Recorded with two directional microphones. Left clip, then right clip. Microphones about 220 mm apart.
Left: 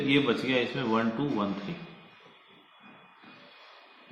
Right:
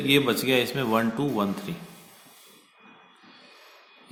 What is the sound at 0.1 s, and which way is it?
A man's voice, 50° right (ahead or behind).